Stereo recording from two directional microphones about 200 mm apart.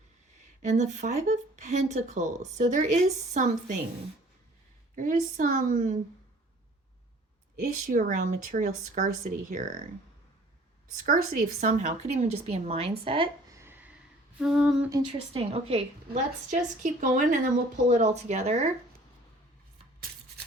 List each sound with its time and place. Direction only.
0.3 s speech: 35° right (ahead or behind)
4.9 s speech: 40° right (ahead or behind)
7.6 s speech: 40° right (ahead or behind)
10.9 s speech: 40° right (ahead or behind)
13.5 s a sound: 10° right (ahead or behind)
14.3 s humming: 5° right (ahead or behind)
14.8 s speech: 20° right (ahead or behind)
15.4 s speech: 30° right (ahead or behind)